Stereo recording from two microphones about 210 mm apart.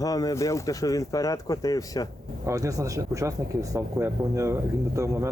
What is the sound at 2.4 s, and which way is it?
Speech, 15° right (ahead or behind).